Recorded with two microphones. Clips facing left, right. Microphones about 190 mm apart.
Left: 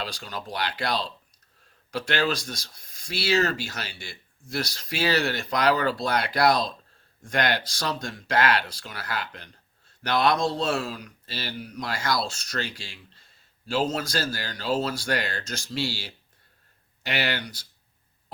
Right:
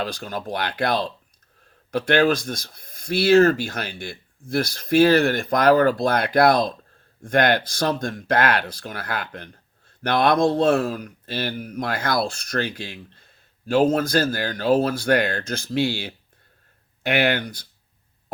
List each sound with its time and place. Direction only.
0.0 s speech: 50° right (ahead or behind)